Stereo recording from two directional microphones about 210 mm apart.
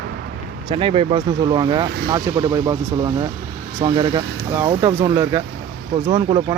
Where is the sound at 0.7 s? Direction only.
25° right (ahead or behind).